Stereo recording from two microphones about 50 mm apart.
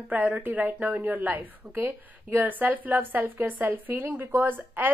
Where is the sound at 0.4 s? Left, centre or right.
Right.